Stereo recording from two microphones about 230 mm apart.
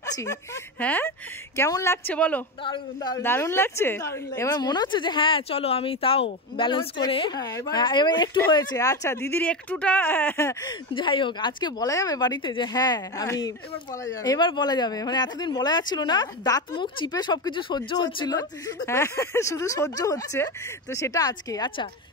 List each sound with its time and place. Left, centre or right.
0.0 s a woman's voice: centre
2.6 s a woman's voice: centre